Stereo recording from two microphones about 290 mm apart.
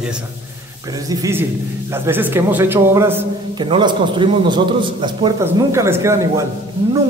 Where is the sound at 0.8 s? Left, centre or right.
Centre.